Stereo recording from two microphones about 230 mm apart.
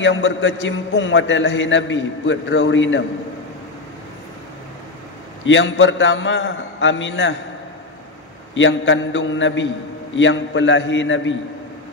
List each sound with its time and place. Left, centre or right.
0.0 s a man's voice: left
5.4 s a man's voice: left
8.5 s a man's voice: left